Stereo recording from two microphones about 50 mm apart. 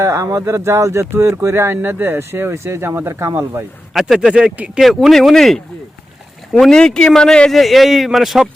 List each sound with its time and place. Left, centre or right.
0.0 s speech: right
3.9 s a man's voice: centre
4.3 s speech: centre
4.8 s a man's voice: centre
7.5 s a man's voice: centre